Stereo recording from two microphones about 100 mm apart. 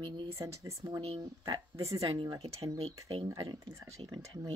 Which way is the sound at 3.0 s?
60° right (ahead or behind).